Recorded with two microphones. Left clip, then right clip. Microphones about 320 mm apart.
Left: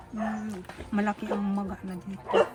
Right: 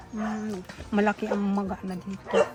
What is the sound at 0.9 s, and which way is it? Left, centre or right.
Speech, centre.